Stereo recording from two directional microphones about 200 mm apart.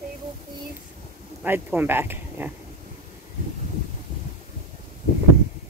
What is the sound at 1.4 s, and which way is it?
Speech, 10° right (ahead or behind).